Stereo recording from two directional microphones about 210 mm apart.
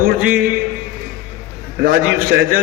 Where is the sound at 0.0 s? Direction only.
45° right (ahead or behind).